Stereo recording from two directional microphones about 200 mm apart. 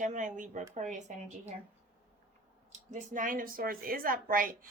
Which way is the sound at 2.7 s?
35° right (ahead or behind).